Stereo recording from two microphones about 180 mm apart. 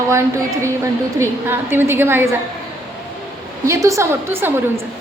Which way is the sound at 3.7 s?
15° right (ahead or behind).